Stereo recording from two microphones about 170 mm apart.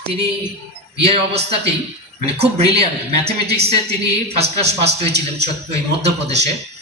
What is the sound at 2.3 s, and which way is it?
Speech, 35° right (ahead or behind).